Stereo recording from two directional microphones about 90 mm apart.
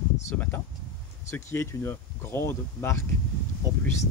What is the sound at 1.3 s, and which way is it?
Speech, 30° left (ahead or behind).